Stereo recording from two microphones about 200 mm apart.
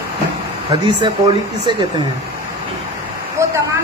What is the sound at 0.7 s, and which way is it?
Speech, 25° right (ahead or behind).